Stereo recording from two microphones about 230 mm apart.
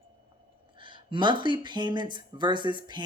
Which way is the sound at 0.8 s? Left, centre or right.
Right.